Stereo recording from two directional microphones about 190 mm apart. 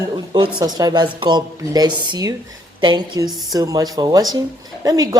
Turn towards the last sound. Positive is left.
turn(degrees=-20)  # may be behind; listen again after turning